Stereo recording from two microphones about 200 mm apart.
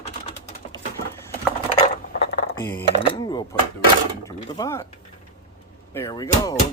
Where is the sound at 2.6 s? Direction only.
10° left (ahead or behind).